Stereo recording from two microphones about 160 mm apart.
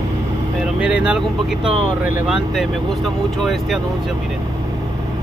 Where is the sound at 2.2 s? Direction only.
Centre (ahead or behind).